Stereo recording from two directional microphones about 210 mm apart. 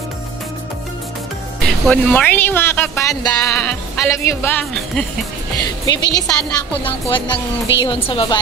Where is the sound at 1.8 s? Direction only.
5° left (ahead or behind).